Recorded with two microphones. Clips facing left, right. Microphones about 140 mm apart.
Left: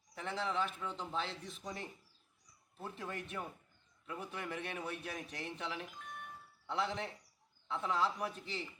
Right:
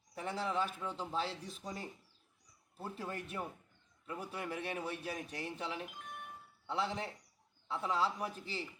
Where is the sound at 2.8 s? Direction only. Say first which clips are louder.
Right 1 dB; 35° right (ahead or behind).